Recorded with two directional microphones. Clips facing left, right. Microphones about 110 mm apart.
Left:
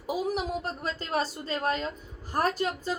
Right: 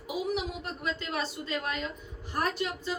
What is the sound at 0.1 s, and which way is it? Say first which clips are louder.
A woman's voice: left 3 dB; 40° left (ahead or behind).